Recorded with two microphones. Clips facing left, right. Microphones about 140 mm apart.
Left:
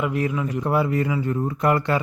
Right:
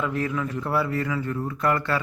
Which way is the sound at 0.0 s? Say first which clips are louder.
Left 3 dB; 15° left (ahead or behind).